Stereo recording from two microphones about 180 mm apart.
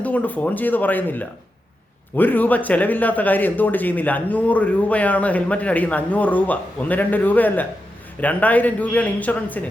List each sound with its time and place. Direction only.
0.0 s speech: 10° left (ahead or behind)